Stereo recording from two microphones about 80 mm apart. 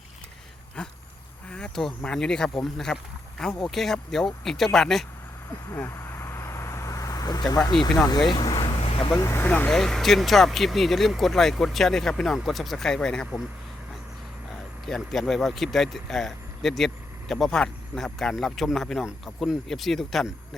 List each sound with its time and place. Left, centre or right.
0.8 s speech: centre
1.5 s a sound: centre
2.1 s speech: centre
5.7 s a sound: left
7.7 s speech: left
8.3 s speech: left
9.1 s speech: left
9.4 s speech: left
9.7 s speech: centre
14.8 s speech: centre